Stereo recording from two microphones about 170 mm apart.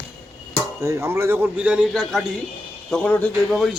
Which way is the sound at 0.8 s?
15° right (ahead or behind).